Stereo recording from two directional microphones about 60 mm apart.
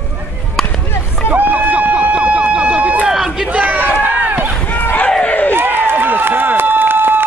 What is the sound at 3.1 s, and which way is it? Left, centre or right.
Crowd, centre.